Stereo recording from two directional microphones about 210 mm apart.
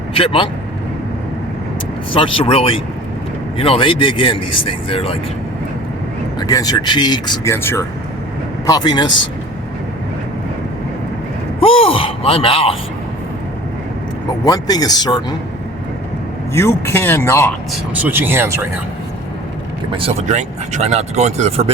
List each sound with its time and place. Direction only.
0.1 s speech: 25° left (ahead or behind)
2.1 s speech: 25° left (ahead or behind)
6.4 s speech: 20° left (ahead or behind)
11.6 s a sound: 25° left (ahead or behind)
14.4 s speech: 20° left (ahead or behind)
16.6 s speech: 10° left (ahead or behind)
17.7 s speech: 10° right (ahead or behind)
20.0 s speech: 30° right (ahead or behind)